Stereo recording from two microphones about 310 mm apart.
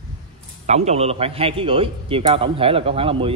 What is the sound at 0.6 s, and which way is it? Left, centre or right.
A man's voice, right.